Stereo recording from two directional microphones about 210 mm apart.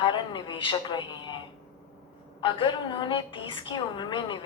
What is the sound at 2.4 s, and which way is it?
A woman's voice, 25° left (ahead or behind).